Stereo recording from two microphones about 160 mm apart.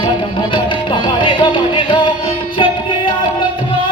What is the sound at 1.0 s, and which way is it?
Music, 30° left (ahead or behind).